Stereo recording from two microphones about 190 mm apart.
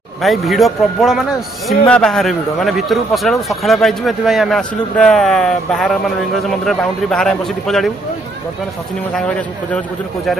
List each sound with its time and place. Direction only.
0.2 s speech: centre (ahead or behind)
9.7 s speech: 5° left (ahead or behind)